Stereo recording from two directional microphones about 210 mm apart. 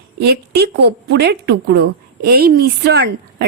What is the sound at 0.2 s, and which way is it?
A woman's voice, 50° right (ahead or behind).